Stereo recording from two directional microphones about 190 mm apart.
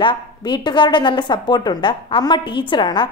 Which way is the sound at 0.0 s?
25° left (ahead or behind).